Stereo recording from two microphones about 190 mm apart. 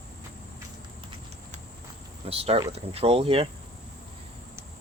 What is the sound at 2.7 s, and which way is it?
Speech, 30° right (ahead or behind).